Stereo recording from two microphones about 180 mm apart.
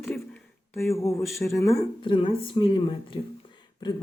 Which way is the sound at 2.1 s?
30° left (ahead or behind).